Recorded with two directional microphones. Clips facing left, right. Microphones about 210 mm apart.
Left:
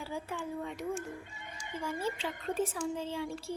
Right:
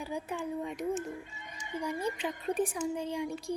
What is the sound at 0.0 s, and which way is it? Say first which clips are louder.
A child's voice: right 2 dB; 15° right (ahead or behind).